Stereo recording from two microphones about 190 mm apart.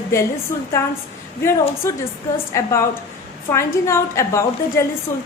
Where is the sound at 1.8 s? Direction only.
15° left (ahead or behind).